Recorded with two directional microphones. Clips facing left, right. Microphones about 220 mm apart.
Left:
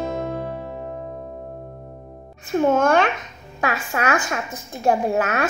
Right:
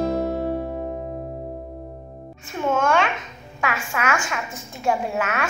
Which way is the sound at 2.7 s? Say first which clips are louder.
Even; 40° left (ahead or behind).